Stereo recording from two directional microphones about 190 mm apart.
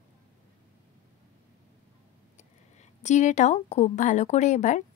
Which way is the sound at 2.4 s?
35° left (ahead or behind).